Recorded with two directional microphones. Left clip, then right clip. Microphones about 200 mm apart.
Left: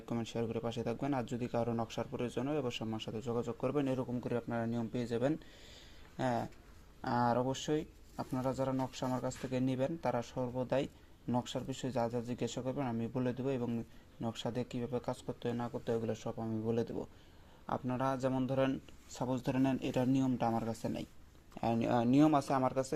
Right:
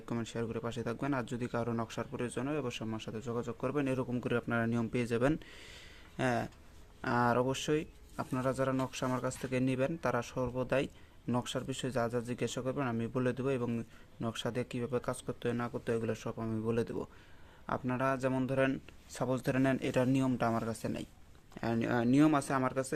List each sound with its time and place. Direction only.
0.0 s a man's voice: 5° right (ahead or behind)
4.2 s speech: 30° right (ahead or behind)
7.0 s a man's voice: 20° right (ahead or behind)